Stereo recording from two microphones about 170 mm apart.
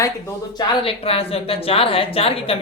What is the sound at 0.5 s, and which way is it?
Speech, 30° left (ahead or behind).